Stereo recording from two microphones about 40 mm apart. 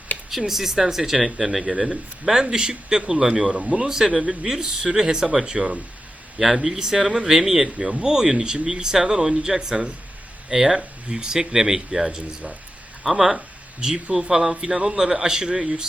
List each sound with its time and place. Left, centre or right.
0.3 s speech: centre
2.3 s a man's voice: centre
6.4 s speech: centre